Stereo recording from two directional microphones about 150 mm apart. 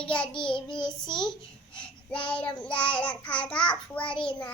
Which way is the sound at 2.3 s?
10° left (ahead or behind).